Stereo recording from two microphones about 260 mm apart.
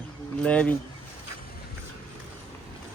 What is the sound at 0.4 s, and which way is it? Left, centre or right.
Speech, centre.